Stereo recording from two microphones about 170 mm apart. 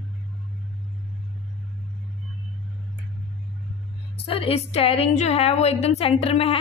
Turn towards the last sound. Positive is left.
turn(degrees=35)  # may be behind; listen again after turning